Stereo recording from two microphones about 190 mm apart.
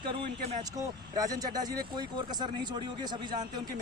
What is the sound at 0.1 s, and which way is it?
Speech, 25° right (ahead or behind).